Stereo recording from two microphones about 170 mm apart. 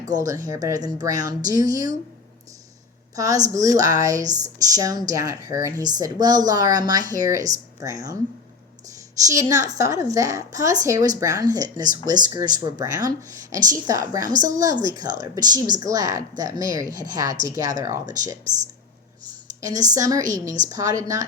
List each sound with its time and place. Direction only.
0.2 s speech: 20° right (ahead or behind)
3.2 s speech: 20° right (ahead or behind)
9.2 s speech: 20° right (ahead or behind)
19.6 s speech: 20° right (ahead or behind)